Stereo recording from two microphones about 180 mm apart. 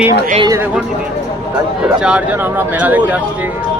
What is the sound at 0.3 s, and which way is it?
Speech, 25° right (ahead or behind).